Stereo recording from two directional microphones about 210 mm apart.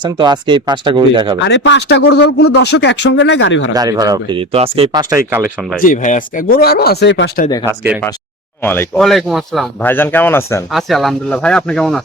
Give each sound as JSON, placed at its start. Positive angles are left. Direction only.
{"t": 0.0, "sound": "speech", "side_deg": -20}
{"t": 1.5, "sound": "speech", "side_deg": 60}
{"t": 3.8, "sound": "speech", "side_deg": -15}
{"t": 5.1, "sound": "speech", "side_deg": -10}
{"t": 5.8, "sound": "speech", "side_deg": 35}
{"t": 8.6, "sound": "speech", "side_deg": 10}
{"t": 10.7, "sound": "speech", "side_deg": 0}